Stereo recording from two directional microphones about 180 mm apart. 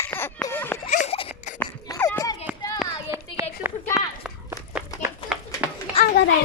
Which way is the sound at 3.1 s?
15° right (ahead or behind).